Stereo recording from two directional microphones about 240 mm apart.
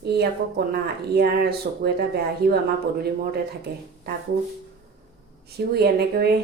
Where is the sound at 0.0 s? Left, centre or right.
Right.